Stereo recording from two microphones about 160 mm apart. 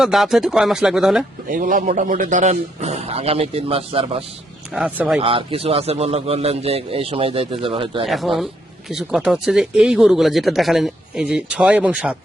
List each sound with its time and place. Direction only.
0.0 s speech: centre (ahead or behind)
1.5 s a man's voice: 60° right (ahead or behind); by 4.2 s 35° right (ahead or behind)
4.7 s speech: 5° right (ahead or behind)
5.2 s a man's voice: 35° right (ahead or behind)
8.0 s speech: centre (ahead or behind)